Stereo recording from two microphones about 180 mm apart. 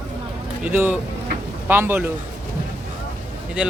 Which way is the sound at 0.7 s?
10° right (ahead or behind).